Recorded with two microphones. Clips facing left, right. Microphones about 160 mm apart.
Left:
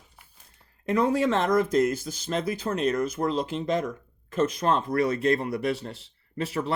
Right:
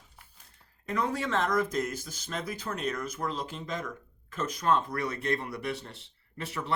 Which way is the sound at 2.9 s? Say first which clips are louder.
Left 9 dB; 30° left (ahead or behind).